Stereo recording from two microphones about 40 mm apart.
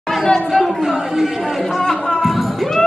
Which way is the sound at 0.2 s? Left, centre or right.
Centre.